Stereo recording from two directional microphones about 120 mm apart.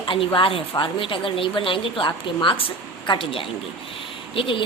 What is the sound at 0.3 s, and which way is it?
A woman's voice, 50° left (ahead or behind).